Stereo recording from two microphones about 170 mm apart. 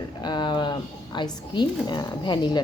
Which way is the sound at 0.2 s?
25° left (ahead or behind).